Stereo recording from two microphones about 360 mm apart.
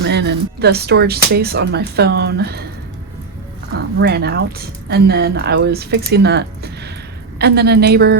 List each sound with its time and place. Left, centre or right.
0.0 s speech: right
3.9 s speech: right